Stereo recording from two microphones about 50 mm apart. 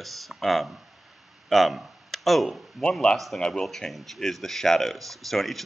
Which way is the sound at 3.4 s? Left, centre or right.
Centre.